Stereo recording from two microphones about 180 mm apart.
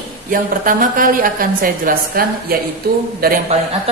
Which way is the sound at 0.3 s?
50° right (ahead or behind).